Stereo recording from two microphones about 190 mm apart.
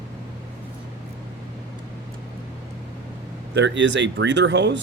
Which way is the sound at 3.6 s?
70° right (ahead or behind).